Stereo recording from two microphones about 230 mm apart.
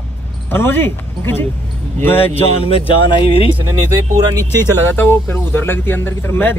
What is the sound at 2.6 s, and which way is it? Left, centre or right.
Speech, left.